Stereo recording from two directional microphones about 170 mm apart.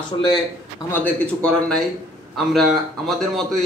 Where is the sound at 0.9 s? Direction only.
10° left (ahead or behind).